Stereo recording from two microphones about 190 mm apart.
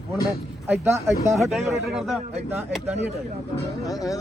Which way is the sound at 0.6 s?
10° right (ahead or behind).